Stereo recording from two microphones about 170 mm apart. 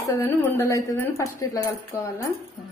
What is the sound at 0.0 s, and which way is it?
A woman's voice, 15° left (ahead or behind).